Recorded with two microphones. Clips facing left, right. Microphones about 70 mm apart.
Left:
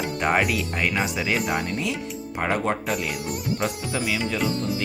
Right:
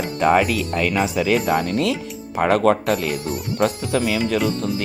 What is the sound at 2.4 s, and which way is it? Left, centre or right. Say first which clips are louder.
Speech: right 8 dB; right.